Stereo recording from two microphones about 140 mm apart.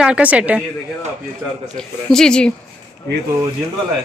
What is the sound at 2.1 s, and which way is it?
Speech, 5° left (ahead or behind).